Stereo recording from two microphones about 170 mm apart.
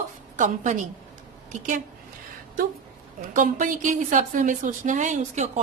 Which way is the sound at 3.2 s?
50° right (ahead or behind).